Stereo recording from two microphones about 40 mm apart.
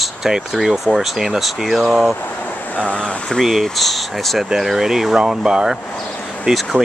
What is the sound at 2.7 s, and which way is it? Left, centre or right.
Speech, left.